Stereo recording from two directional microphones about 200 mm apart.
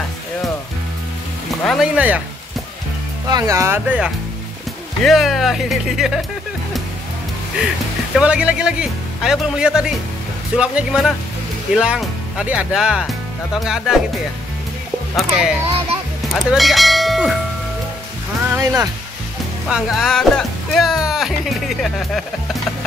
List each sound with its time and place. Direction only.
1.7 s speech: 5° right (ahead or behind)
3.3 s speech: 15° right (ahead or behind); by 6.2 s centre (ahead or behind)
8.1 s speech: 5° right (ahead or behind)
15.1 s speech: 5° right (ahead or behind)
18.5 s speech: 15° right (ahead or behind)
19.7 s speech: centre (ahead or behind)